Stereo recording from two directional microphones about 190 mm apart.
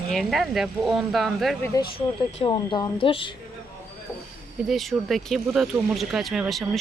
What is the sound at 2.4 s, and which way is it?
Speech, 25° left (ahead or behind).